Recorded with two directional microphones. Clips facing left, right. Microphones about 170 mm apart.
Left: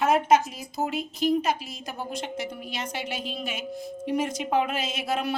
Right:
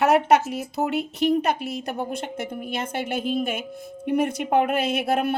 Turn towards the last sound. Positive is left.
turn(degrees=-55)  # may be behind; listen again after turning